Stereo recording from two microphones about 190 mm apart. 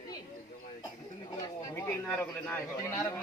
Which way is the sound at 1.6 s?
10° left (ahead or behind).